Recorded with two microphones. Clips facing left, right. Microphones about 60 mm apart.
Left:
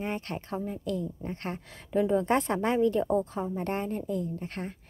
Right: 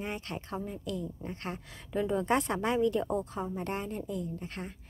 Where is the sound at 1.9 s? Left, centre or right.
Centre.